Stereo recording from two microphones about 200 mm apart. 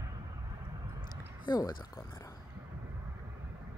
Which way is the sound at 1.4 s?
20° left (ahead or behind).